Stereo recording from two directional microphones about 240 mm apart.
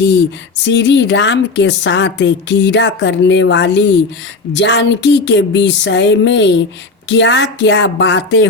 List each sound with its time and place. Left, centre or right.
0.6 s a woman's voice: left